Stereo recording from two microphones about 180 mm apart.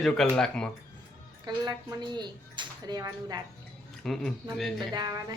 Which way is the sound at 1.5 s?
25° right (ahead or behind).